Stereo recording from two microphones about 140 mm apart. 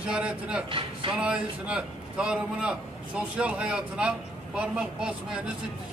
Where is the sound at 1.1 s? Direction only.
5° right (ahead or behind).